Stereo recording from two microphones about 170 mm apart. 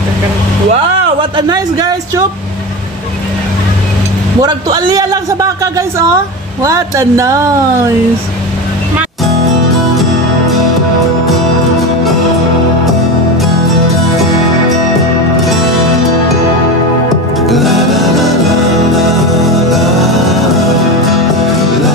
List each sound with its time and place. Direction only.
1.3 s a man's voice: 25° right (ahead or behind)
4.4 s a man's voice: 25° right (ahead or behind)
17.5 s music: centre (ahead or behind)